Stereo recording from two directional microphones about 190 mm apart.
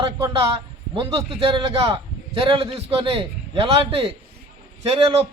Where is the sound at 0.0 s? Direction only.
25° right (ahead or behind).